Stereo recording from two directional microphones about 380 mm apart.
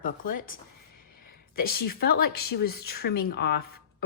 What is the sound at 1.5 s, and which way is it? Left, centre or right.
Speech, left.